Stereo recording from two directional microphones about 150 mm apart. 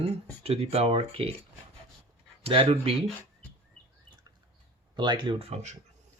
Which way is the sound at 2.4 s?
35° right (ahead or behind).